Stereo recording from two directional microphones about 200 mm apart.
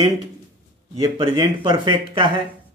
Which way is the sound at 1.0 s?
20° right (ahead or behind).